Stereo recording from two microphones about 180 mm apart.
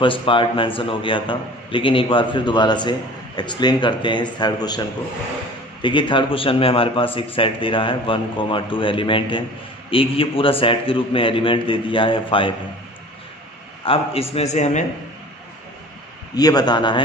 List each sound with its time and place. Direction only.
0.0 s a man's voice: 30° left (ahead or behind)
5.8 s a man's voice: 25° left (ahead or behind)
13.8 s a man's voice: 30° left (ahead or behind)
16.3 s a man's voice: 20° left (ahead or behind)